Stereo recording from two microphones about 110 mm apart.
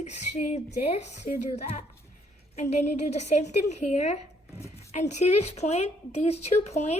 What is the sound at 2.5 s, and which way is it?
A woman's voice, 85° left.